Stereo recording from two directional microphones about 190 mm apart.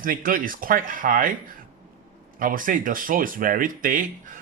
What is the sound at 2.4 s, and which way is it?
Speech, 45° right (ahead or behind).